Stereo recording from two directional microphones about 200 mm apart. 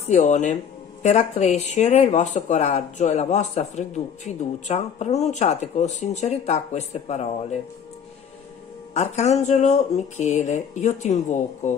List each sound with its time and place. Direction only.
0.0 s speech: 35° left (ahead or behind)
8.9 s speech: 35° left (ahead or behind)